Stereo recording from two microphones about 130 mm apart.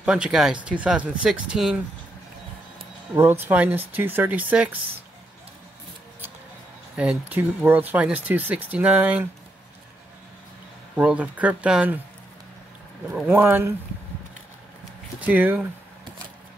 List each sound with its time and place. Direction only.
0.0 s speech: 5° right (ahead or behind)
3.2 s speech: 15° right (ahead or behind)
7.0 s speech: 10° right (ahead or behind)
11.0 s speech: 10° right (ahead or behind)
13.3 s speech: 15° right (ahead or behind)
15.1 s speech: 15° right (ahead or behind)